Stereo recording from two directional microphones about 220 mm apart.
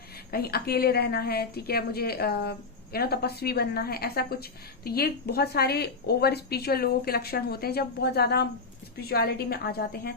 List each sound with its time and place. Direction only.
0.3 s a woman's voice: 45° left (ahead or behind)